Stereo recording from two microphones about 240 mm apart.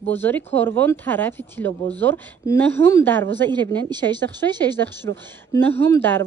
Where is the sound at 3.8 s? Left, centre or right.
Centre.